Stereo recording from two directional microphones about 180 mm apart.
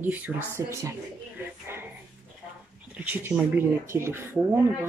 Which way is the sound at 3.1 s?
10° right (ahead or behind).